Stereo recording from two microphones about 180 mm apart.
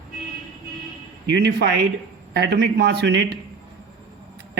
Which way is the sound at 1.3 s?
70° right (ahead or behind).